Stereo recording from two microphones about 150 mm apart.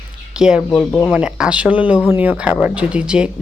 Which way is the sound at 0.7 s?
10° left (ahead or behind).